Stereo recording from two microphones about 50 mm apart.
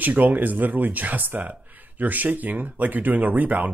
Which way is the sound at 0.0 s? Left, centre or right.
Right.